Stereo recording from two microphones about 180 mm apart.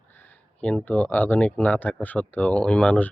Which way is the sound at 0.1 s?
10° left (ahead or behind).